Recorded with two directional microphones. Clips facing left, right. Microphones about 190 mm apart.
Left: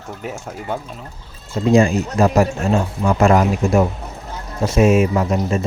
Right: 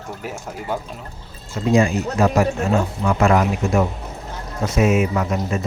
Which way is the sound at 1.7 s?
35° left (ahead or behind).